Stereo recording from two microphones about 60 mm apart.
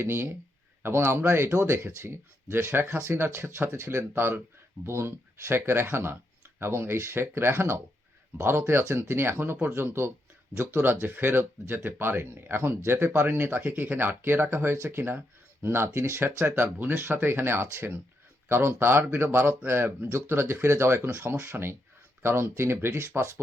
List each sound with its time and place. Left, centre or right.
0.0 s speech: right